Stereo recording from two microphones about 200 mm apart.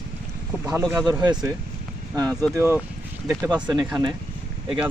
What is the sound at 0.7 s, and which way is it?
Speech, 15° right (ahead or behind).